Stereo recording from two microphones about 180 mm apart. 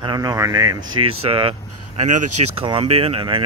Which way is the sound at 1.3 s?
30° right (ahead or behind).